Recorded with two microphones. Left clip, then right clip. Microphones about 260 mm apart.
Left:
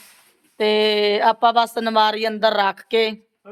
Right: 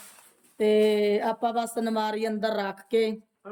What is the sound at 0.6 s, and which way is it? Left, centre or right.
Speech, centre.